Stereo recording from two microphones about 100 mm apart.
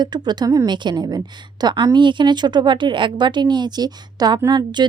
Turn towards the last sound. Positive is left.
turn(degrees=-50)  # may be behind; listen again after turning